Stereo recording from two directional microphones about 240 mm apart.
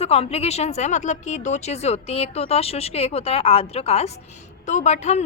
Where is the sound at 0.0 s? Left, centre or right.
Left.